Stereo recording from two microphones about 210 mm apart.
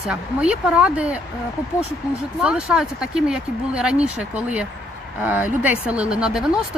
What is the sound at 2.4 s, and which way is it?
Speech, 5° right (ahead or behind).